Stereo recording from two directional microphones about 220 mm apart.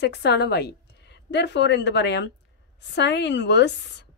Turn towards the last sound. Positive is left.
turn(degrees=50)  # may be behind; listen again after turning